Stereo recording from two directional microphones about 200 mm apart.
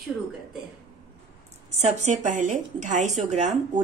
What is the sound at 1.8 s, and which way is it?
A woman's voice, 35° right (ahead or behind).